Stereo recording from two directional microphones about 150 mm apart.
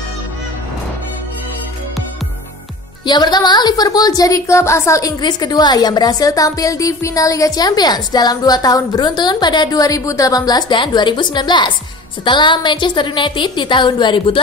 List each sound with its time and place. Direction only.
3.1 s a woman's voice: 30° left (ahead or behind)